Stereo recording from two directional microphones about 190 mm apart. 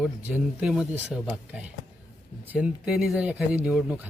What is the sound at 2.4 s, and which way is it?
Speech, 5° right (ahead or behind).